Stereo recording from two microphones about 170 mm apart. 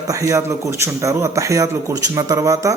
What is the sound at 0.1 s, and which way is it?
A man's voice, 20° right (ahead or behind).